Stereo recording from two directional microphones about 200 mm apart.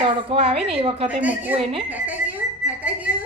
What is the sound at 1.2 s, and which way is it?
Speech, 10° right (ahead or behind).